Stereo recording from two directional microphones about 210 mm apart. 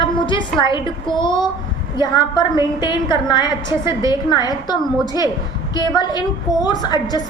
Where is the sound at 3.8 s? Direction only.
15° right (ahead or behind).